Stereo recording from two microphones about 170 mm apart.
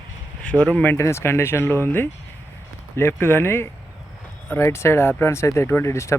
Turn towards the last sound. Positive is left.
turn(degrees=15)  # may be behind; listen again after turning